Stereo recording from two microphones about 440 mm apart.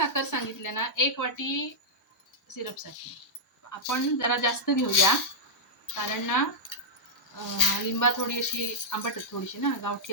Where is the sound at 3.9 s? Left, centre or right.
Left.